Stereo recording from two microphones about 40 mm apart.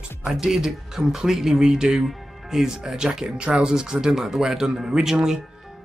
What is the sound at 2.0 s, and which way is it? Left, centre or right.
Speech, centre.